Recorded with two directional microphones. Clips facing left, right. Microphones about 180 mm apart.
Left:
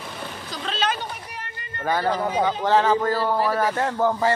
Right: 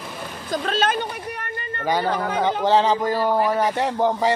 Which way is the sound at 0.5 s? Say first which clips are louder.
Right 5 dB; 50° right (ahead or behind).